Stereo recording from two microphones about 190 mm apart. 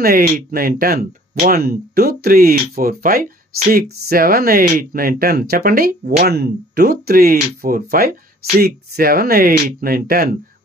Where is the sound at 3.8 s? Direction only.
55° right (ahead or behind).